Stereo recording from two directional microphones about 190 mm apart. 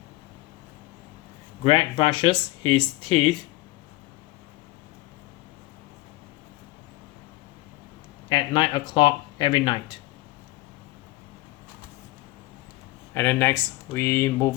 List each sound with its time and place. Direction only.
1.6 s speech: 25° left (ahead or behind)
8.3 s speech: 25° left (ahead or behind)
13.1 s speech: 10° left (ahead or behind)